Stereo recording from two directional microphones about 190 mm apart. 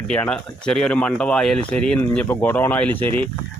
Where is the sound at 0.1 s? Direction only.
5° left (ahead or behind).